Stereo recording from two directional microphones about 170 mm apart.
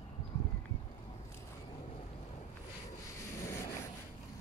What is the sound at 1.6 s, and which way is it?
Boat, 30° left (ahead or behind).